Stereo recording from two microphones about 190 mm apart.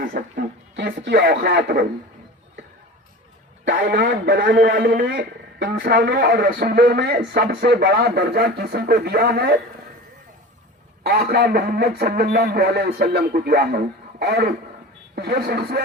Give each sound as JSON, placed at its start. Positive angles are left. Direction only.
{"t": 0.0, "sound": "a man's voice", "side_deg": -55}
{"t": 3.9, "sound": "a man's voice", "side_deg": -65}
{"t": 11.0, "sound": "a man's voice", "side_deg": -55}